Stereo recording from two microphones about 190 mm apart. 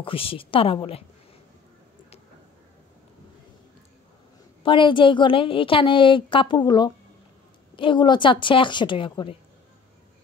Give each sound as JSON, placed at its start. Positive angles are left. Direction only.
{"t": 0.0, "sound": "a woman's voice", "side_deg": 30}
{"t": 4.6, "sound": "a woman's voice", "side_deg": 25}